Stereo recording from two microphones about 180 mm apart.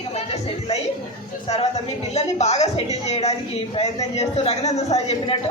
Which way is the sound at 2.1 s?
40° left (ahead or behind).